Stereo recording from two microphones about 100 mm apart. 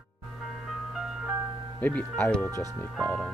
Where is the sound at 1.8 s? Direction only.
20° left (ahead or behind).